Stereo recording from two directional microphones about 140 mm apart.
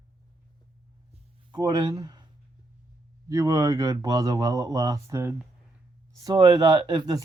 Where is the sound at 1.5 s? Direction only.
30° right (ahead or behind).